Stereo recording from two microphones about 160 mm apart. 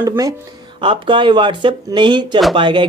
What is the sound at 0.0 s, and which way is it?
A man's voice, 20° right (ahead or behind).